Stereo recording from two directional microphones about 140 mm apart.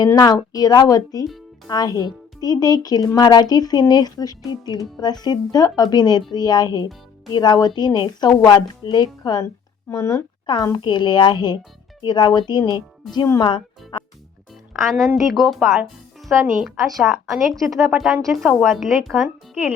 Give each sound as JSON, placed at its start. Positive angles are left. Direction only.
{"t": 0.0, "sound": "a woman's voice", "side_deg": 25}
{"t": 13.9, "sound": "music", "side_deg": 35}
{"t": 14.7, "sound": "a woman's voice", "side_deg": 0}
{"t": 17.5, "sound": "speech", "side_deg": -25}
{"t": 17.9, "sound": "a woman's voice", "side_deg": 0}